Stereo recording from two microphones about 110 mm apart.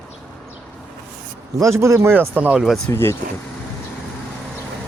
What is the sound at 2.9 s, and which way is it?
Speech, 20° left (ahead or behind).